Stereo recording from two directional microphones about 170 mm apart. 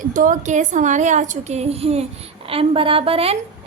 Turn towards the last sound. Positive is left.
turn(degrees=-35)  # may be behind; listen again after turning